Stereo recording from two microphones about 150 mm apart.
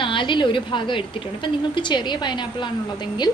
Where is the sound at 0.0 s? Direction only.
35° left (ahead or behind).